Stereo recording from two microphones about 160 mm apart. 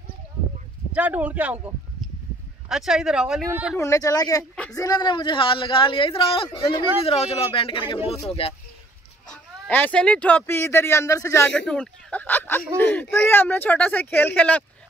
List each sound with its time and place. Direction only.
0.9 s speech: 10° right (ahead or behind)
2.7 s speech: 5° right (ahead or behind)
3.7 s speech: 20° left (ahead or behind); by 8.5 s 40° left (ahead or behind)
9.3 s speech: 10° left (ahead or behind)
11.5 s speech: 5° left (ahead or behind)